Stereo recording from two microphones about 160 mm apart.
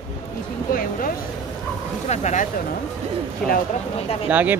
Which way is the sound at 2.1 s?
45° left (ahead or behind).